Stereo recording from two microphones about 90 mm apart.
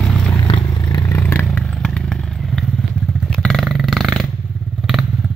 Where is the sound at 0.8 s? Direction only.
50° left (ahead or behind).